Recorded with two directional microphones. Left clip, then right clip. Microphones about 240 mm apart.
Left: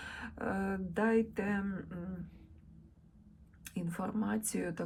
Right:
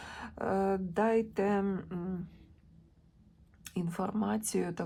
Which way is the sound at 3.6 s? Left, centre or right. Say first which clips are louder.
Right 4 dB; centre.